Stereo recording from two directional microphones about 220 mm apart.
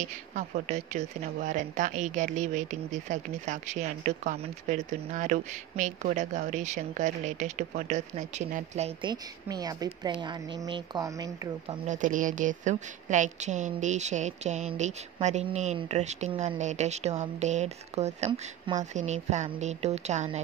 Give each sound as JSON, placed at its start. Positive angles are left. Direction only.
{"t": 0.0, "sound": "speech", "side_deg": -30}
{"t": 9.1, "sound": "speech", "side_deg": -15}
{"t": 11.9, "sound": "speech", "side_deg": -35}